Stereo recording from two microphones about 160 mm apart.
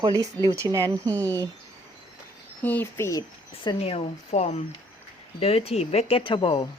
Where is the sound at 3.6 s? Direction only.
40° left (ahead or behind).